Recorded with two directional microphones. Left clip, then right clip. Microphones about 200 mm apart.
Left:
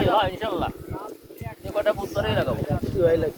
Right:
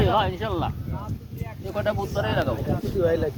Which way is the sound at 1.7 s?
35° left (ahead or behind).